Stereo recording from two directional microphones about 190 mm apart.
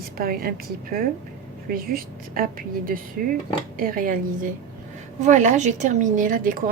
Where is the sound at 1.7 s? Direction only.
50° right (ahead or behind).